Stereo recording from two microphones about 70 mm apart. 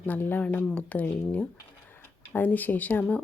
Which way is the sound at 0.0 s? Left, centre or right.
Left.